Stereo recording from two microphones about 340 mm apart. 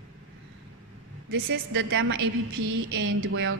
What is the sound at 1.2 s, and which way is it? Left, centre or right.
A woman's voice, right.